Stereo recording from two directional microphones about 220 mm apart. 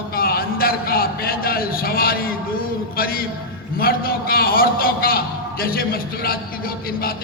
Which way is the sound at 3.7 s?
40° left (ahead or behind).